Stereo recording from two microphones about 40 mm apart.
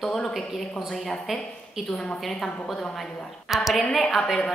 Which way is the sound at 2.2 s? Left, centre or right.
Centre.